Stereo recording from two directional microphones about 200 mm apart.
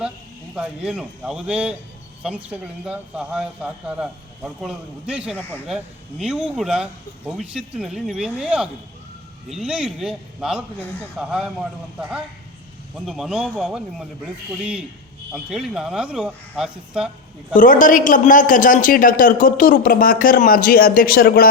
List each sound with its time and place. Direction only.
0.5 s a man's voice: 5° right (ahead or behind)
17.5 s a man's voice: 40° left (ahead or behind)